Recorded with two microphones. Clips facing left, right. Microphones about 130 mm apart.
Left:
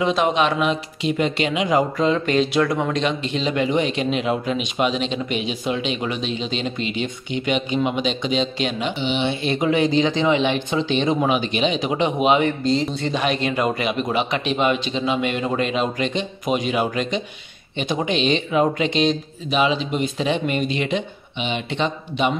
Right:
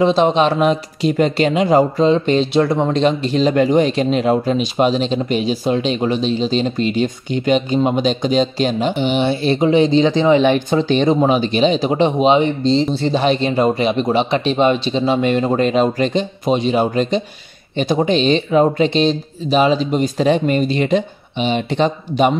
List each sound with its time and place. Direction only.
0.0 s speech: 30° right (ahead or behind)
8.9 s speech: 50° right (ahead or behind)